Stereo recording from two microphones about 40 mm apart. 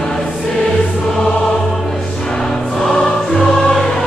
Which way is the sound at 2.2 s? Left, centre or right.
Centre.